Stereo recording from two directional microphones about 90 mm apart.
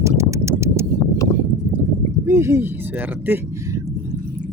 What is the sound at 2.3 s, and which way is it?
Speech, 30° right (ahead or behind).